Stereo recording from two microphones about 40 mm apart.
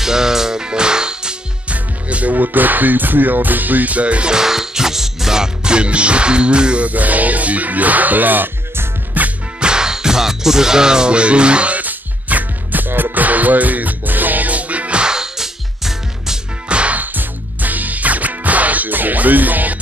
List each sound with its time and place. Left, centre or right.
0.0 s music: centre
1.7 s music: right
2.3 s speech: right
4.3 s music: centre
6.9 s speech: right
9.2 s music: right
9.6 s music: centre
11.8 s music: right; by 16.3 s centre
16.6 s music: right
17.0 s music: right